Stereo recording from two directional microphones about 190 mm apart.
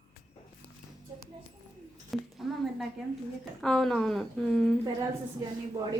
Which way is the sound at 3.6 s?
Centre (ahead or behind).